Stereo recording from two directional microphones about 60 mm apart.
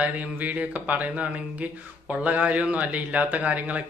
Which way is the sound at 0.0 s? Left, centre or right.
Right.